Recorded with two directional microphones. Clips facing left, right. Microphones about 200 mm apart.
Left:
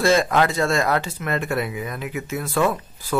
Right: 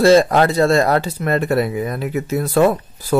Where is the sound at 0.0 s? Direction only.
35° right (ahead or behind).